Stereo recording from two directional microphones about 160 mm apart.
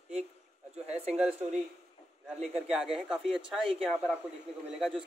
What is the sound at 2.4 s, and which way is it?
A man's voice, 5° right (ahead or behind).